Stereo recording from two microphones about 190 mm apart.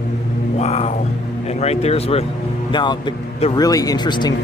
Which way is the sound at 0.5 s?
35° left (ahead or behind).